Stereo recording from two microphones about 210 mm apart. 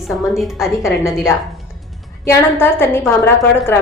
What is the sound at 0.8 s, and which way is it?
A woman's voice, 15° left (ahead or behind).